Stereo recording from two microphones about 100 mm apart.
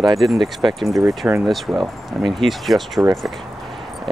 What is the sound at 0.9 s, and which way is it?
Speech, 30° right (ahead or behind).